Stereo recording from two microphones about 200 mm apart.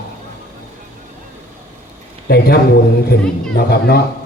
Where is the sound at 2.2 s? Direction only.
50° left (ahead or behind).